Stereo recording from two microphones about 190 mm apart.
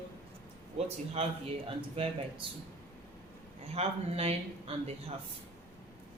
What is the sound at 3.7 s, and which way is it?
A man's voice, 30° right (ahead or behind).